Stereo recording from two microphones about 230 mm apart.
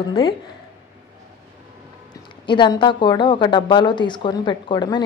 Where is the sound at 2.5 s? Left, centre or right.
Centre.